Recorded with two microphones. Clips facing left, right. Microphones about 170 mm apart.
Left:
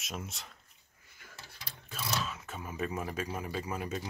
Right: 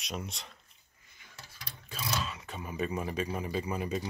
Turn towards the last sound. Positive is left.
turn(degrees=0)  # may be behind; listen again after turning